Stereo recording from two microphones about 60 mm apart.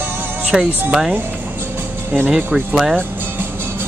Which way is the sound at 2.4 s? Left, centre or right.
Right.